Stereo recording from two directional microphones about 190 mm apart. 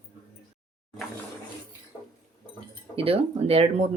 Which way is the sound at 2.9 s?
30° right (ahead or behind).